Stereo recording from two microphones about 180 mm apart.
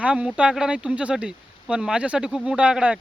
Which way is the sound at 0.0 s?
5° right (ahead or behind).